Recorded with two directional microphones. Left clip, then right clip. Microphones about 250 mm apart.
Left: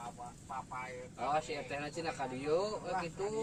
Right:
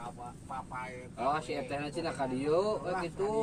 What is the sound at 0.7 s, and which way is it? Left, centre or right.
Speech, right.